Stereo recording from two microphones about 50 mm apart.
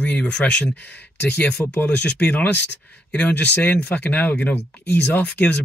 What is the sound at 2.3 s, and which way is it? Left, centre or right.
Speech, left.